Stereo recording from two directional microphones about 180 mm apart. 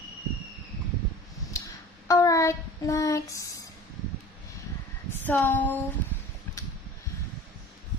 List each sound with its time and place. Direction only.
1.5 s child singing: 20° left (ahead or behind)
5.1 s female singing: 10° left (ahead or behind)